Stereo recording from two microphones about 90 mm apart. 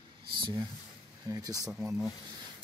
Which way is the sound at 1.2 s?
45° right (ahead or behind).